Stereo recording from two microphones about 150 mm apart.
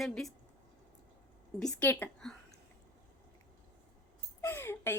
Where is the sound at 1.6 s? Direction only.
5° left (ahead or behind).